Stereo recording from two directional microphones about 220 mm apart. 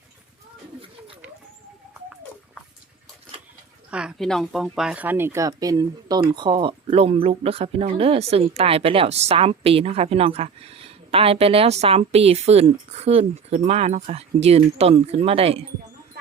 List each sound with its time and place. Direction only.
3.9 s speech: centre (ahead or behind); by 15.6 s 25° right (ahead or behind)